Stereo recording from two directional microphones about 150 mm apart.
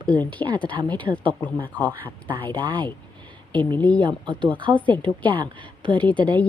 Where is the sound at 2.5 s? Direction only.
30° right (ahead or behind).